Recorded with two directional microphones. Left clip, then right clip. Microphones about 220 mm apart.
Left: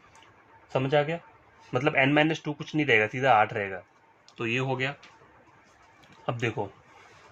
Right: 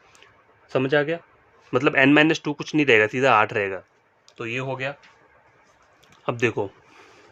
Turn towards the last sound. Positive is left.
turn(degrees=-40)  # may be behind; listen again after turning